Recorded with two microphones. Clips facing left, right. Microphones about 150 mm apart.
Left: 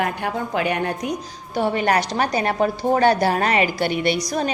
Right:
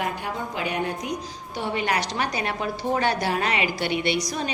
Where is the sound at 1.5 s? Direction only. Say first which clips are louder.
Left 6 dB; 45° left (ahead or behind).